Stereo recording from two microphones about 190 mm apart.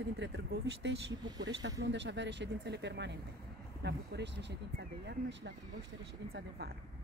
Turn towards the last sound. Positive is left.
turn(degrees=-60)  # may be behind; listen again after turning